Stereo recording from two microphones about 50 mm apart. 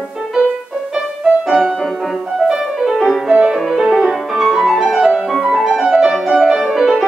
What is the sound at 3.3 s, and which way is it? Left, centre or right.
Music, centre.